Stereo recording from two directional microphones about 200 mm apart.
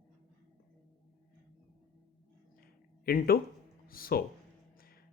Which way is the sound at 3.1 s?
45° left (ahead or behind).